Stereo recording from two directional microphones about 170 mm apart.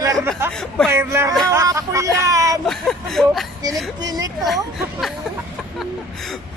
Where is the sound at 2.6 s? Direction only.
Centre (ahead or behind).